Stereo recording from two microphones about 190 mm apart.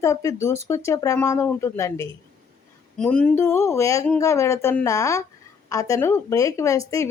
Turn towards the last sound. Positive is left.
turn(degrees=15)  # may be behind; listen again after turning